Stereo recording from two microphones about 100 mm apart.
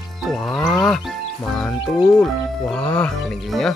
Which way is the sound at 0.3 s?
Centre (ahead or behind).